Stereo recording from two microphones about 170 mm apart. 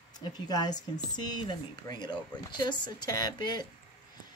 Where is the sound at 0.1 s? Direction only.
25° left (ahead or behind).